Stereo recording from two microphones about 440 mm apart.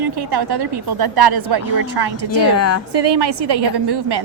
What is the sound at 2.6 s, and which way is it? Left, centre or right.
Speech, left.